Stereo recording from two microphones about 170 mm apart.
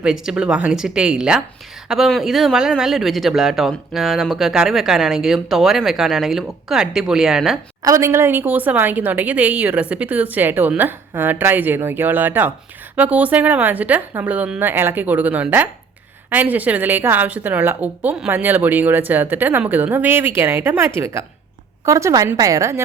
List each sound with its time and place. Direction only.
0.0 s speech: 5° right (ahead or behind)
7.8 s a woman's voice: 20° right (ahead or behind)